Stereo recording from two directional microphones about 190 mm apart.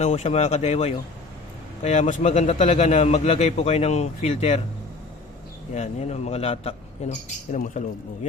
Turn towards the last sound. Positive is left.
turn(degrees=40)  # may be behind; listen again after turning